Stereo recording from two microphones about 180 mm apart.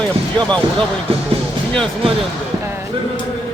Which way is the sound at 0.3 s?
5° left (ahead or behind).